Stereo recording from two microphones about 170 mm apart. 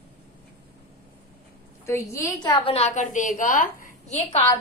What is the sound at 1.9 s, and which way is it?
Speech, 15° left (ahead or behind).